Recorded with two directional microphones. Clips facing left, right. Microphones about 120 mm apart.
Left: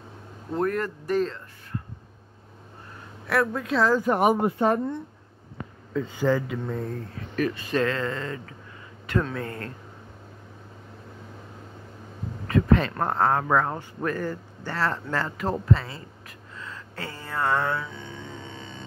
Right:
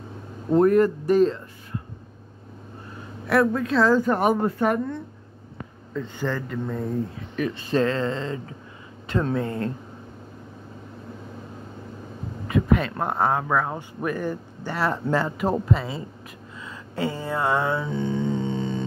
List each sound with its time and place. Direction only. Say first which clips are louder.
0.5 s speech: right 9 dB; 15° right (ahead or behind)
3.3 s a woman's voice: right 4 dB; centre (ahead or behind); by 4.9 s 25° left (ahead or behind)
5.9 s a man's voice: left 4 dB; 5° left (ahead or behind)
6.8 s speech: right 5 dB; 15° right (ahead or behind)
7.5 s speech: right 3 dB; 30° right (ahead or behind)
12.4 s speech: even; 10° right (ahead or behind)
16.5 s a sound: right 7 dB; 15° right (ahead or behind)
17.8 s music: right 14 dB; 35° right (ahead or behind)